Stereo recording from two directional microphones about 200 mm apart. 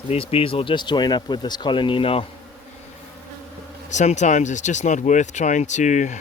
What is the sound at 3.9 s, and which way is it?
Speech, 35° left (ahead or behind).